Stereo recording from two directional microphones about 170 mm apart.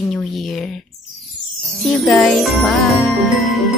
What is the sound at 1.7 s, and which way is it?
A woman's voice, centre (ahead or behind).